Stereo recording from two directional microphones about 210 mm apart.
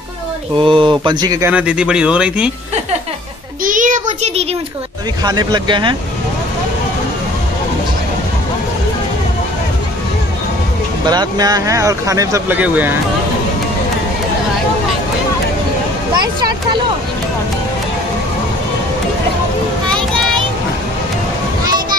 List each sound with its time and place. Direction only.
0.6 s speech: 25° right (ahead or behind)
1.5 s speech: 5° right (ahead or behind)
3.6 s a child's voice: 40° right (ahead or behind)
5.2 s speech: 20° right (ahead or behind)
11.1 s speech: 20° right (ahead or behind)
16.2 s a sound: 20° right (ahead or behind)